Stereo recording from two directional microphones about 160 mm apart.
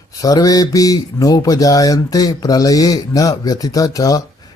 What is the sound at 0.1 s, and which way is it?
Speech, 20° left (ahead or behind).